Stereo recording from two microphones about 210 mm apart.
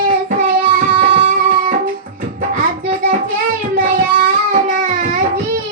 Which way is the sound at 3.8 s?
40° right (ahead or behind).